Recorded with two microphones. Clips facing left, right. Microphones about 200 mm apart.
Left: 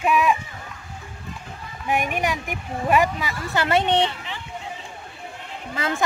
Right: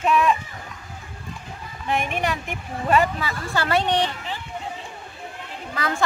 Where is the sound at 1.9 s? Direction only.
10° left (ahead or behind).